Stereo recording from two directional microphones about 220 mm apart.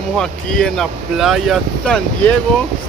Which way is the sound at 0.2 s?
5° left (ahead or behind).